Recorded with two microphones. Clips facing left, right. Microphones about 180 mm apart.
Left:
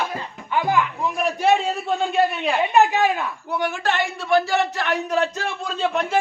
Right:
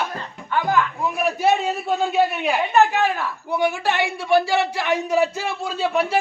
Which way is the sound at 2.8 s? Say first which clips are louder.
Even; 15° left (ahead or behind).